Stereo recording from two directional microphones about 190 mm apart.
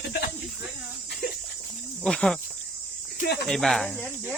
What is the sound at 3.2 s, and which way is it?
Speech, 55° left (ahead or behind).